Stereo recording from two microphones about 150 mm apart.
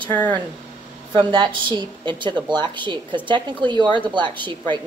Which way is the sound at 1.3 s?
30° right (ahead or behind).